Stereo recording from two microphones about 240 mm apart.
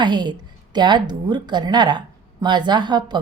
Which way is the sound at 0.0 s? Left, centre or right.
Centre.